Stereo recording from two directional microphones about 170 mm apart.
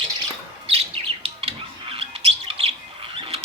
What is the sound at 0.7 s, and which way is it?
Bird, 35° right (ahead or behind).